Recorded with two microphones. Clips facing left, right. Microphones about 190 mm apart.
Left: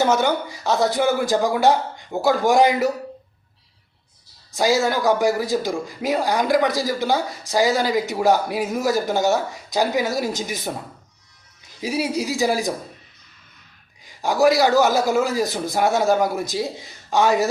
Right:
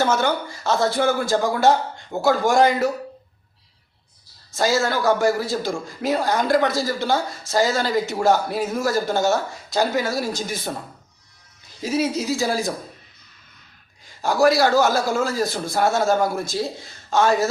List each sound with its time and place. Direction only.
0.0 s speech: 15° left (ahead or behind)
4.5 s speech: 15° left (ahead or behind)
11.8 s speech: 15° left (ahead or behind)
14.0 s speech: 15° left (ahead or behind)